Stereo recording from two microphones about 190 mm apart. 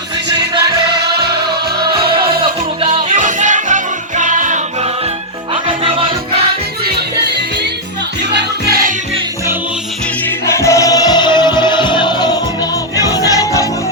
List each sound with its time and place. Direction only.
2.0 s music: 25° right (ahead or behind)
3.2 s music: 40° right (ahead or behind)
10.4 s music: 15° left (ahead or behind)